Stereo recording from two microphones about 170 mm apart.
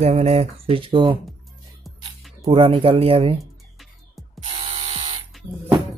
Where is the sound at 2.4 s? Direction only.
35° right (ahead or behind).